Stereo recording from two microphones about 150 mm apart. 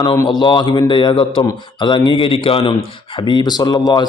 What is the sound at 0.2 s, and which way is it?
A man's voice, 30° left (ahead or behind).